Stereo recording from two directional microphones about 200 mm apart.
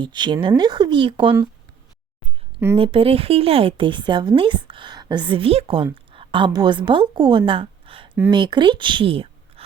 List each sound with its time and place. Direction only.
0.0 s speech: 20° right (ahead or behind)
2.7 s a woman's voice: 30° right (ahead or behind)